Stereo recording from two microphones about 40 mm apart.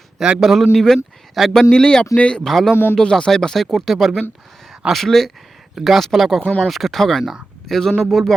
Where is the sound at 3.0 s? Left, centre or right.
Left.